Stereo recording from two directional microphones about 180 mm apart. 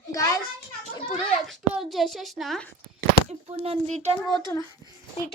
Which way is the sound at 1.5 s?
Centre (ahead or behind).